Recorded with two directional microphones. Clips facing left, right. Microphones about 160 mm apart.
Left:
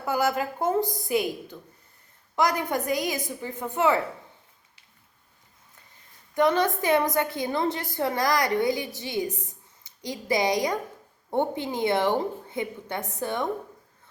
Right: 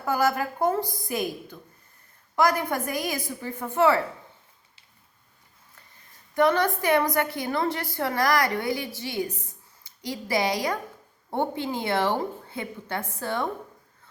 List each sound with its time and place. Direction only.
0.0 s a woman's voice: 15° left (ahead or behind)
6.3 s a woman's voice: 15° left (ahead or behind)